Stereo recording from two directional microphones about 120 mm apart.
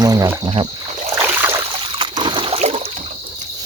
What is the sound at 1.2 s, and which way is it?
Boat, 20° right (ahead or behind).